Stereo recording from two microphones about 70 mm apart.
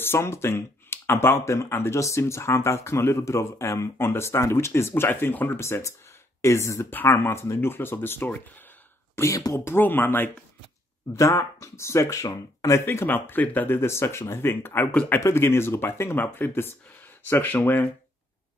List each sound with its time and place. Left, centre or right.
0.0 s speech: left
5.6 s speech: left
9.1 s speech: left
9.5 s speech: left
11.1 s speech: left
12.8 s speech: left
13.7 s speech: left
14.9 s speech: centre
15.1 s speech: left